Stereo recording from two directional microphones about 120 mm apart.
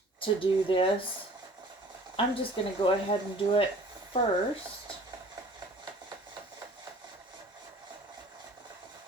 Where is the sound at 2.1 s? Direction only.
50° left (ahead or behind).